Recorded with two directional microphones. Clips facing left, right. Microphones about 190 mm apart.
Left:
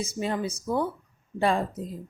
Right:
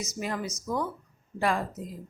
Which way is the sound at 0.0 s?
30° left (ahead or behind).